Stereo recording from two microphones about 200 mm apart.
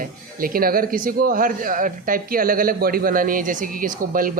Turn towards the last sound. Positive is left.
turn(degrees=-45)  # may be behind; listen again after turning